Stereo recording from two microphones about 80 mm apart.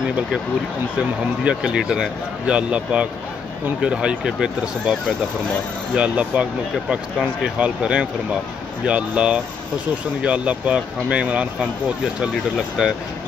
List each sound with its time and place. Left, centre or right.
0.9 s speech: centre
5.9 s speech: centre